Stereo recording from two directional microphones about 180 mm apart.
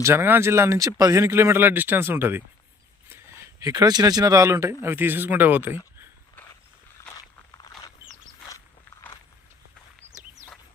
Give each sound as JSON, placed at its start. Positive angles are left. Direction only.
{"t": 0.0, "sound": "speech", "side_deg": -15}
{"t": 7.2, "sound": "walk", "side_deg": 20}